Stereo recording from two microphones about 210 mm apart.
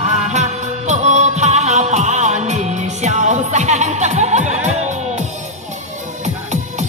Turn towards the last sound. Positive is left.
turn(degrees=-35)  # may be behind; listen again after turning